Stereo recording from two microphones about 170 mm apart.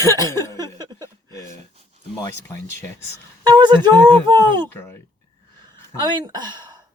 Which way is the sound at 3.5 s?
25° right (ahead or behind).